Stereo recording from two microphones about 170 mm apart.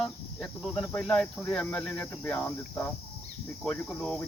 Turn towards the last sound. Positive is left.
turn(degrees=5)  # may be behind; listen again after turning